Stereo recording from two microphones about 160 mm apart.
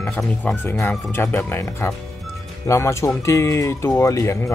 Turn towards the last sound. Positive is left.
turn(degrees=20)  # may be behind; listen again after turning